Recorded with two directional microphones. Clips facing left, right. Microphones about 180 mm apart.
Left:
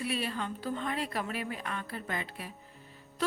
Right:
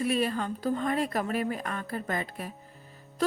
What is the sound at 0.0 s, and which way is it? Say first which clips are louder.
Speech: right 6 dB; 45° right (ahead or behind).